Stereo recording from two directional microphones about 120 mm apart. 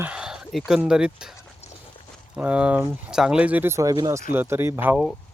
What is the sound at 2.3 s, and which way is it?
Speech, 10° right (ahead or behind).